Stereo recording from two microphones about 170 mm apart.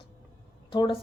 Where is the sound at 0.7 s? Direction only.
30° left (ahead or behind).